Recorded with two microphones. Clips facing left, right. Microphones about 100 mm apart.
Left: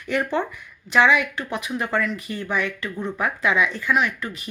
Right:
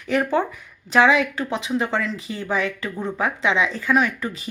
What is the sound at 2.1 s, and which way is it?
Speech, 90° right.